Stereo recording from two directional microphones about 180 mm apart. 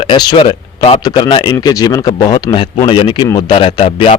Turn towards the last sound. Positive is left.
turn(degrees=30)  # may be behind; listen again after turning